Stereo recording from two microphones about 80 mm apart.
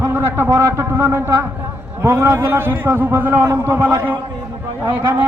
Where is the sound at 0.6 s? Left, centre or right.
Right.